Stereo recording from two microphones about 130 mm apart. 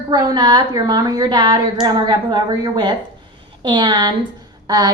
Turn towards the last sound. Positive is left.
turn(degrees=-30)  # may be behind; listen again after turning